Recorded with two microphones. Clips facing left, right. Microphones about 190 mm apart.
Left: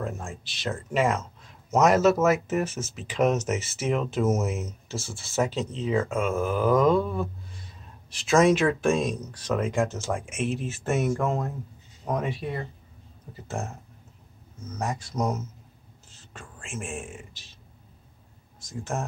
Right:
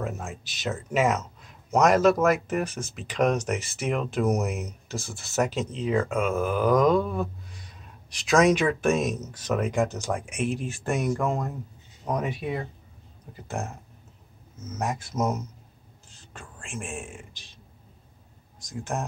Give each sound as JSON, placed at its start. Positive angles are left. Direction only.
{"t": 0.0, "sound": "speech", "side_deg": -5}
{"t": 4.6, "sound": "speech", "side_deg": -15}
{"t": 5.2, "sound": "speech", "side_deg": 0}
{"t": 18.7, "sound": "speech", "side_deg": 0}